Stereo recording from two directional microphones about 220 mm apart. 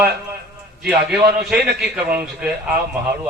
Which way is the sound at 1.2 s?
45° right (ahead or behind).